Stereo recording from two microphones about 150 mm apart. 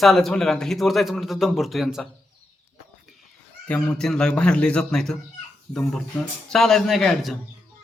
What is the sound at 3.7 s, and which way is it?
A man's voice, 5° left (ahead or behind).